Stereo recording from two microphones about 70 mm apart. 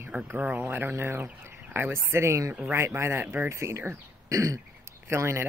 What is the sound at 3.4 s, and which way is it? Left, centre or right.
Speech, right.